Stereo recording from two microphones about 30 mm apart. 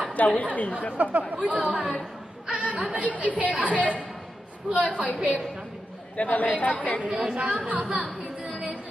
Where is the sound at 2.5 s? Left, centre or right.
Right.